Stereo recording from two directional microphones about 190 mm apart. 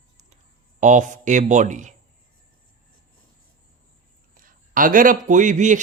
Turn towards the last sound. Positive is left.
turn(degrees=-40)  # may be behind; listen again after turning